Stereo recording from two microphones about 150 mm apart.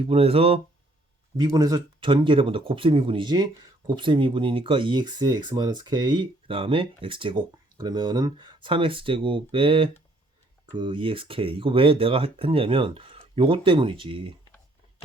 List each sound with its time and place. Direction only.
0.0 s speech: 40° right (ahead or behind)
1.4 s speech: 25° right (ahead or behind)